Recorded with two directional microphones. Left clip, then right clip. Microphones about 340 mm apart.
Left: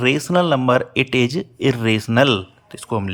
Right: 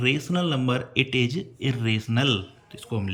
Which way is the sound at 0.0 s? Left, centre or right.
Centre.